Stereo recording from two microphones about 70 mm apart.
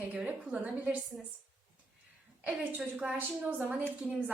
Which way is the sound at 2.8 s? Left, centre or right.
Centre.